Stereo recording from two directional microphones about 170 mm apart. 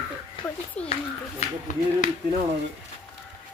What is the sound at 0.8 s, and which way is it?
Speech, 10° left (ahead or behind).